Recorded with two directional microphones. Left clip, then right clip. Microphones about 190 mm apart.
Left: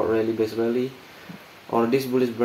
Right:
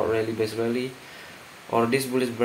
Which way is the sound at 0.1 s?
40° left (ahead or behind).